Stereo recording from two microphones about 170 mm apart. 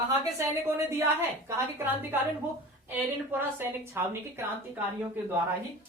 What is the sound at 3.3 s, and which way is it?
A woman's voice, 15° right (ahead or behind).